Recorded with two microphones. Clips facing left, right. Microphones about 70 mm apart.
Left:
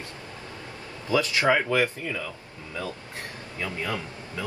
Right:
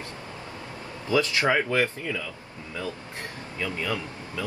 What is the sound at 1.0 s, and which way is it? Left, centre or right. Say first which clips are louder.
Speech: left 1 dB; left.